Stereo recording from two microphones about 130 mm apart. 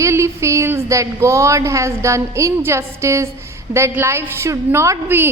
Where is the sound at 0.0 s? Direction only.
20° right (ahead or behind).